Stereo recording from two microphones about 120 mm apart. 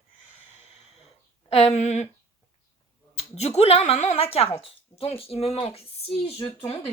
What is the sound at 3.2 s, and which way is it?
Speech, 65° left (ahead or behind).